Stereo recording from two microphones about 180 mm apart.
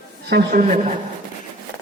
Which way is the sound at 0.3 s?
65° right (ahead or behind).